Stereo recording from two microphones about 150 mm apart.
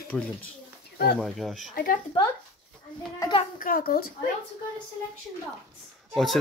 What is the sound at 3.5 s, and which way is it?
Speech, 70° left (ahead or behind).